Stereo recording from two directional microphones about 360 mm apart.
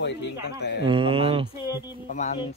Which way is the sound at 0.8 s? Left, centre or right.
Centre.